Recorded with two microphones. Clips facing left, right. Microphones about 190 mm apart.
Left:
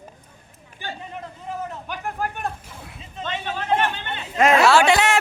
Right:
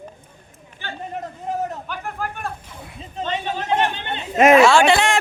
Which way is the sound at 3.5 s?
15° right (ahead or behind).